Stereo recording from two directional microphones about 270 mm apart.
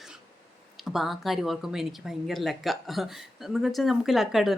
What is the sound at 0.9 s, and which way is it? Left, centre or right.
Speech, centre.